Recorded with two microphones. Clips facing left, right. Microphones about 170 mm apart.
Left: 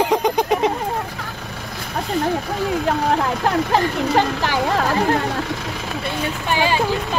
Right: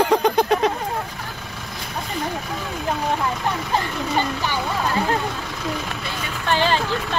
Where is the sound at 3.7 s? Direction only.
90° left.